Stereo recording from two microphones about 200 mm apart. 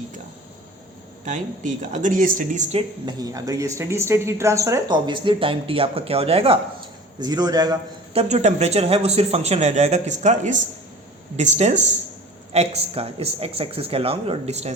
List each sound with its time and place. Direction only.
1.2 s speech: 40° right (ahead or behind)
3.1 s speech: 20° right (ahead or behind)
8.1 s speech: 30° right (ahead or behind)